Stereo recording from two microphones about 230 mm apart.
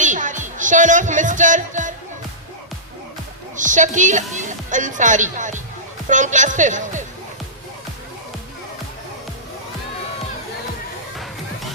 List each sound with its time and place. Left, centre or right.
0.0 s music: right
3.5 s speech: right